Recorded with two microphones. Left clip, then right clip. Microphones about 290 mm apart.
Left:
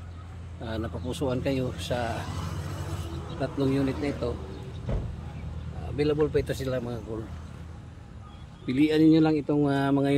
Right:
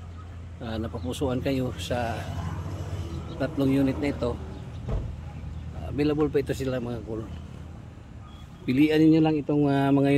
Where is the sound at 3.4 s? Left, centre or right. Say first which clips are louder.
Right 2 dB; centre.